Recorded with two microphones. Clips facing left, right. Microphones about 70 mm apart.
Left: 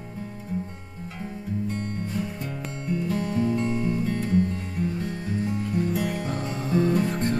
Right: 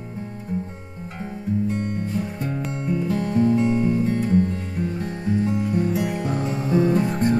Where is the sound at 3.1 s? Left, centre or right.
Right.